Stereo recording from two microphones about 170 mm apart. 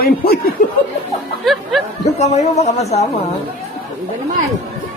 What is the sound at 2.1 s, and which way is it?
Speech, 40° left (ahead or behind).